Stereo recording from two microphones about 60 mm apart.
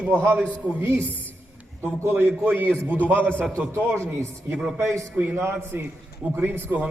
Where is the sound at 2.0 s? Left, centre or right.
Right.